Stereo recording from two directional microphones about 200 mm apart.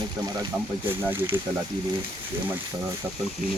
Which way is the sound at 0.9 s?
10° right (ahead or behind).